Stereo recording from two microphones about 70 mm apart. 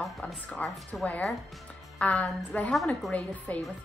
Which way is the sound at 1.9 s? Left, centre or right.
Centre.